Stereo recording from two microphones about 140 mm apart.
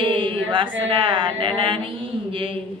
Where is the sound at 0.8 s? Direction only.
35° right (ahead or behind).